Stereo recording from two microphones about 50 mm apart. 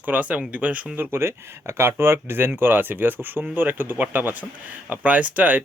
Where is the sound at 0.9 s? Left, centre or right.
Right.